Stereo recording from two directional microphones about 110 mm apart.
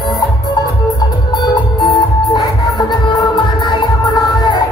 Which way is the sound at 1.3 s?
40° left (ahead or behind).